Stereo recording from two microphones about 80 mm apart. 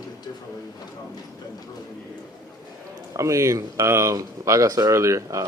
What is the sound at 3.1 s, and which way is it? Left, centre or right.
Speech, right.